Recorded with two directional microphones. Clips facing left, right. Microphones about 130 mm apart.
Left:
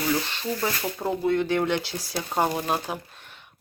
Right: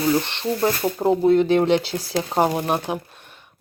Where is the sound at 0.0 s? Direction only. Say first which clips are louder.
Right 6 dB; 20° right (ahead or behind).